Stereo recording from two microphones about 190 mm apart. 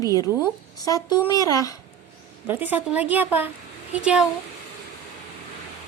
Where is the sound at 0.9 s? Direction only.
20° left (ahead or behind).